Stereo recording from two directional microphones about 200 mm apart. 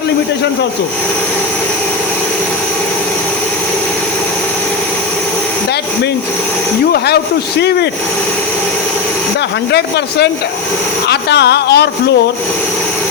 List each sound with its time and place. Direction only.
11.1 s speech: 55° left (ahead or behind)